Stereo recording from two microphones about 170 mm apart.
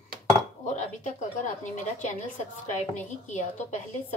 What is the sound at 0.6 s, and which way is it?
A woman's voice, 45° left (ahead or behind).